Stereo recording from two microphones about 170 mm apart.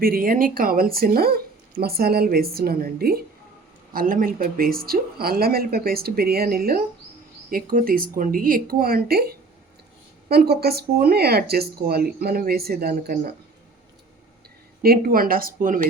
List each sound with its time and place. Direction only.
0.0 s speech: 55° right (ahead or behind)
10.2 s speech: 65° right (ahead or behind)
14.8 s speech: 60° right (ahead or behind)